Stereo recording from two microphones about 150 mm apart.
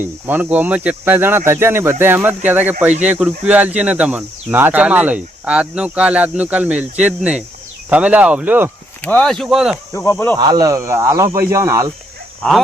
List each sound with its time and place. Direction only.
0.3 s speech: 10° right (ahead or behind)
9.0 s speech: 5° left (ahead or behind)
9.9 s speech: 20° left (ahead or behind)
10.3 s speech: 25° right (ahead or behind)